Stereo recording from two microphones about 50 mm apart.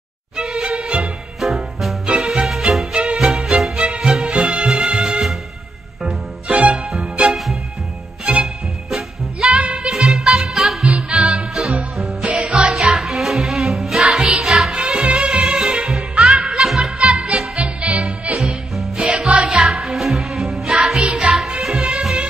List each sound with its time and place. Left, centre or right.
0.4 s music: centre
1.4 s music: centre
6.5 s music: centre
6.9 s music: centre
9.4 s music: centre
9.8 s music: centre
10.8 s music: right
12.0 s music: centre
12.3 s music: right
12.7 s music: centre
16.5 s music: centre
17.0 s music: centre
17.6 s music: right
18.3 s music: centre